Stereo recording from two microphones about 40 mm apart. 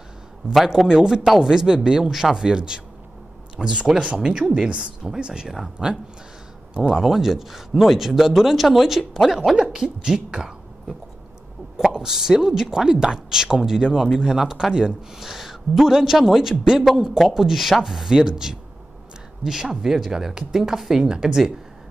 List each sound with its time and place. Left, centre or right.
0.7 s speech: centre
9.6 s speech: centre
11.7 s speech: centre